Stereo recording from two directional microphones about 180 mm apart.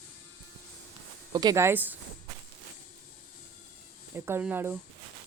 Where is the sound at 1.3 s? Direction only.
20° right (ahead or behind).